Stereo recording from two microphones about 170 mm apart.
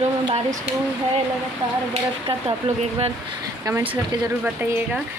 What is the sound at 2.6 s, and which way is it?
Speech, 35° right (ahead or behind).